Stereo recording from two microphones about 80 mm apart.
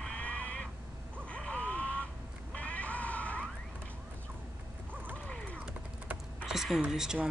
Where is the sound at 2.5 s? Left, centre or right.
Centre.